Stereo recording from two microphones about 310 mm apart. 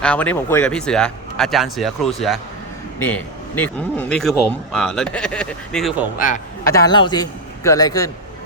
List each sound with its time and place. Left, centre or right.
0.0 s a man's voice: centre
6.1 s a man's voice: left
6.7 s a man's voice: centre